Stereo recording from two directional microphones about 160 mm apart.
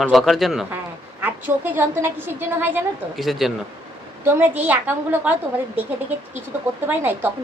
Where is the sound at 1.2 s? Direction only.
10° right (ahead or behind).